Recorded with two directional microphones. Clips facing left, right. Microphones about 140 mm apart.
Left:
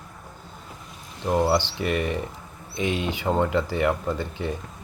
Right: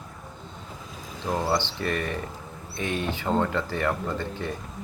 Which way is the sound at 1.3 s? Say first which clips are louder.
Left 5 dB; 15° left (ahead or behind).